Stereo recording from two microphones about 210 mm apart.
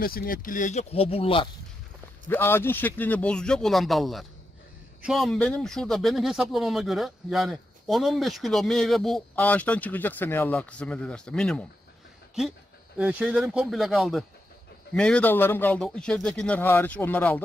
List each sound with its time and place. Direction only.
0.0 s speech: 45° left (ahead or behind); by 1.5 s 25° left (ahead or behind)
2.3 s speech: 10° left (ahead or behind)
13.0 s speech: 5° right (ahead or behind)